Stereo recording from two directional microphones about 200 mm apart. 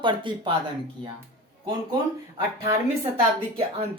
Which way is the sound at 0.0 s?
25° right (ahead or behind).